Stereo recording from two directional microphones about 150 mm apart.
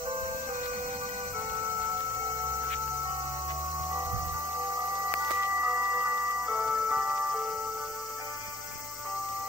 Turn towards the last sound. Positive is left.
turn(degrees=-5)  # may be behind; listen again after turning